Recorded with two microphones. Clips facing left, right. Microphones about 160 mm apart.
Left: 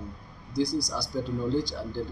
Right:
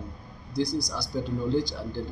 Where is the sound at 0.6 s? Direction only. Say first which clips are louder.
Left 1 dB; 35° left (ahead or behind).